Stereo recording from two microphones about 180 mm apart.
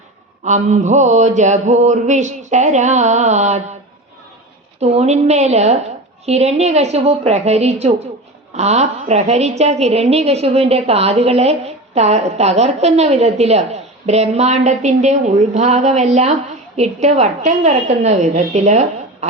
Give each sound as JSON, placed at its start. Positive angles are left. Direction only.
{"t": 0.4, "sound": "a woman's voice", "side_deg": -40}
{"t": 4.8, "sound": "a woman's voice", "side_deg": -35}